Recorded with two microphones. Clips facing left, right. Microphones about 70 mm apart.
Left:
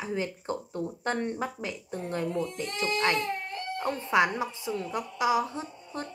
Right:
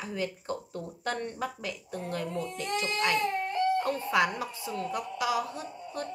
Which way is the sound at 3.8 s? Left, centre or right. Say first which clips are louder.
Left 1 dB; left.